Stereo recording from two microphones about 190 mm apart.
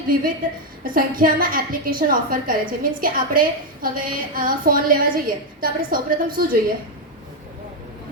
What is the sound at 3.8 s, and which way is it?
A woman's voice, 50° right (ahead or behind).